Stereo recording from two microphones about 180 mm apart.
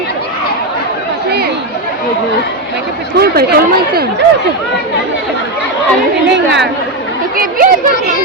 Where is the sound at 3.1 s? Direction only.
60° right (ahead or behind).